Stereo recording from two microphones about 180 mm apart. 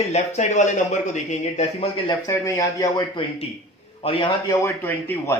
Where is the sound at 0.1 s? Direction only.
40° left (ahead or behind).